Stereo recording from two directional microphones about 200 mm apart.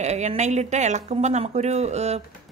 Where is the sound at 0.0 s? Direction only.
35° right (ahead or behind).